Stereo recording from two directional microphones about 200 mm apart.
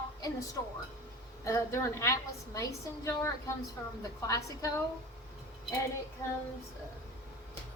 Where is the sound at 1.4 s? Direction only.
15° left (ahead or behind).